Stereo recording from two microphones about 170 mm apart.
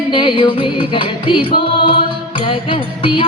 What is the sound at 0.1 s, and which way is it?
Music, 30° left (ahead or behind).